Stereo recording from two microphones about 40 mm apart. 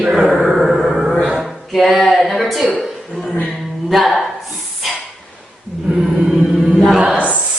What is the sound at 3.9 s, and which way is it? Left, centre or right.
Music, centre.